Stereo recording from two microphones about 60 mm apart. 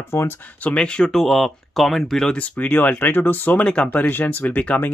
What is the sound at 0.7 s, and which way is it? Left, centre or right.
Speech, centre.